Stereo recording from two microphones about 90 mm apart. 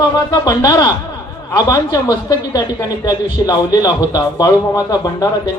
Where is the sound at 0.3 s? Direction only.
45° left (ahead or behind).